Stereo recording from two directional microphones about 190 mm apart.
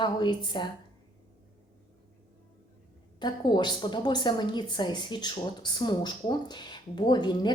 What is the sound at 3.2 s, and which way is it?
A woman's voice, 25° left (ahead or behind).